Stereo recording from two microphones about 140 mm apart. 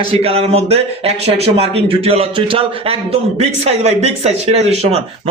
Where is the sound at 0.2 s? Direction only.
45° right (ahead or behind).